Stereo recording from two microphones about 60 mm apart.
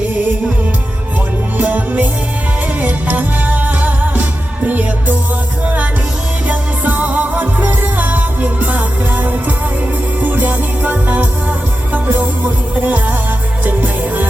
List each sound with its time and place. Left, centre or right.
1.5 s music: right
6.5 s music: right
12.8 s music: right